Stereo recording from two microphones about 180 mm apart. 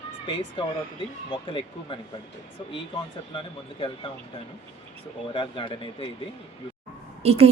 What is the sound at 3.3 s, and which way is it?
Speech, 30° left (ahead or behind).